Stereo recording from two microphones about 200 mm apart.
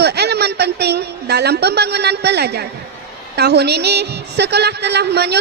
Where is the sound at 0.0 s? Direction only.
55° right (ahead or behind).